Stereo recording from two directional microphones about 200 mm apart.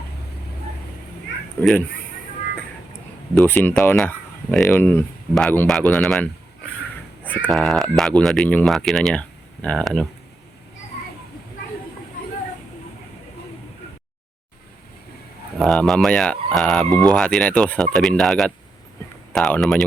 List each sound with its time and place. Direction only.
1.6 s speech: 10° left (ahead or behind)
3.3 s speech: 10° left (ahead or behind)
7.3 s speech: 5° left (ahead or behind)
15.5 s speech: centre (ahead or behind)